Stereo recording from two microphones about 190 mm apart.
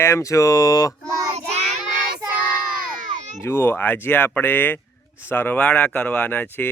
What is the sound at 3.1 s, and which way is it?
Baby cry, 40° right (ahead or behind).